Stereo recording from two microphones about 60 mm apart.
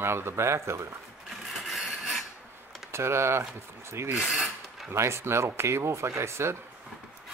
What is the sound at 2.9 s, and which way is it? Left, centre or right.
Speech, right.